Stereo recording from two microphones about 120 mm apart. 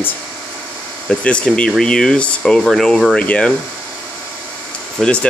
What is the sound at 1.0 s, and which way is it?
Speech, 10° left (ahead or behind).